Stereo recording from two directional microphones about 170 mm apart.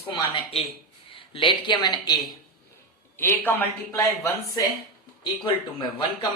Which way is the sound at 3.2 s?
10° left (ahead or behind).